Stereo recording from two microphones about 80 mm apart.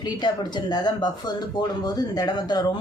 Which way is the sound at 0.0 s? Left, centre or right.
Left.